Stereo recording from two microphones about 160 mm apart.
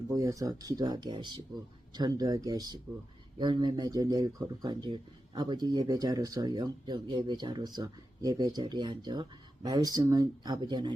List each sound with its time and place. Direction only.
0.1 s speech: 20° right (ahead or behind)